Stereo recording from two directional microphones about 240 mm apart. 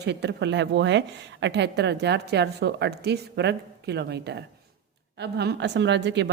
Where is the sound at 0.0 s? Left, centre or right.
Right.